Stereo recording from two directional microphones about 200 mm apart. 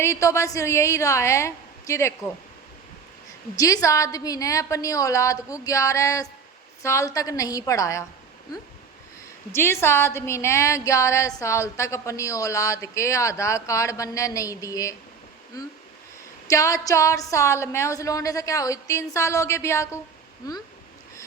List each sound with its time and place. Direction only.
0.0 s a woman's voice: 15° left (ahead or behind)
3.6 s a woman's voice: 15° left (ahead or behind)
9.5 s a woman's voice: 15° left (ahead or behind)
16.5 s a woman's voice: 15° left (ahead or behind)